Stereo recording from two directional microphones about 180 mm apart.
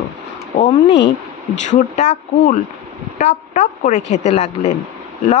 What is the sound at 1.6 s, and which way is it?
Speech, 40° left (ahead or behind).